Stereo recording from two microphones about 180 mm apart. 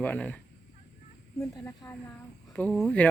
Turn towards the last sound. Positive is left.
turn(degrees=5)  # may be behind; listen again after turning